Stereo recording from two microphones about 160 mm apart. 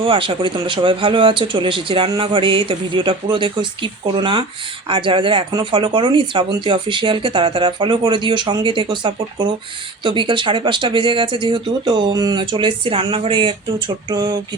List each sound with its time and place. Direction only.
0.0 s speech: 35° right (ahead or behind)